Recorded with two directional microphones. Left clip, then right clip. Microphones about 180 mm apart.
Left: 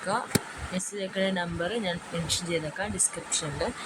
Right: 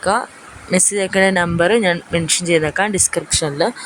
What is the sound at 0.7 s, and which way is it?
Speech, 60° right (ahead or behind).